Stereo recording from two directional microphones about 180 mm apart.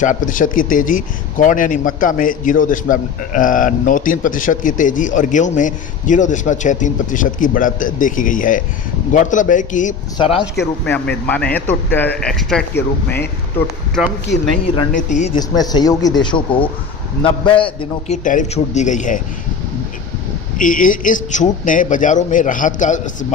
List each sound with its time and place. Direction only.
0.0 s speech: 45° left (ahead or behind)
10.2 s speech: 30° left (ahead or behind)
10.8 s speech: 10° left (ahead or behind)
14.0 s speech: centre (ahead or behind)
14.9 s speech: 45° left (ahead or behind)
15.4 s speech: 20° left (ahead or behind)
18.2 s speech: 45° left (ahead or behind)
20.6 s speech: 50° left (ahead or behind)